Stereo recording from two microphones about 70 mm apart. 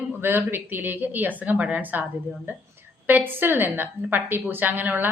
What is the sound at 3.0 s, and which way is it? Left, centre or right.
A woman's voice, right.